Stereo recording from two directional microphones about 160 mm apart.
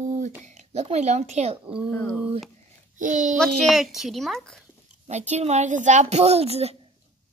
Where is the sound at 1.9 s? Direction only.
10° left (ahead or behind).